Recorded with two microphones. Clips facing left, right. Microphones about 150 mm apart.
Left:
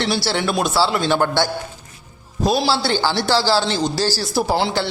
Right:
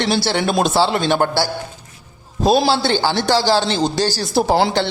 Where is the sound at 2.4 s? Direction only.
25° right (ahead or behind).